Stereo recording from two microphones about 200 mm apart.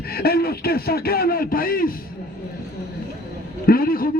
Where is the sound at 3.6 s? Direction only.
50° left (ahead or behind).